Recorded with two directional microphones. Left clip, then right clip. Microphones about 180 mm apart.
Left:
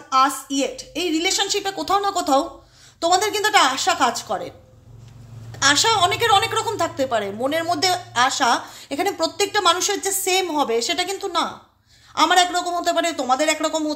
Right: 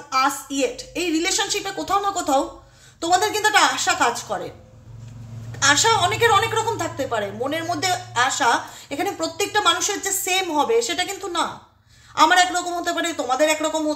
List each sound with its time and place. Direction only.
0.1 s a woman's voice: 35° left (ahead or behind)
5.6 s a woman's voice: 35° left (ahead or behind)